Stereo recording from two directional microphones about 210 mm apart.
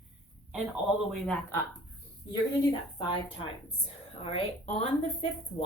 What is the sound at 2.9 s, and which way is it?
Speech, 25° left (ahead or behind).